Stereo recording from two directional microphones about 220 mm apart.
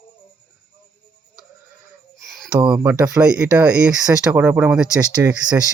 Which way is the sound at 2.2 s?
Centre (ahead or behind).